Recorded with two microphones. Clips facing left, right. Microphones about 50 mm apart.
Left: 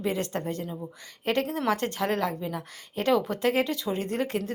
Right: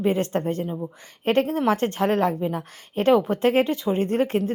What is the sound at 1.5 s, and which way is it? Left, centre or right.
A woman's voice, right.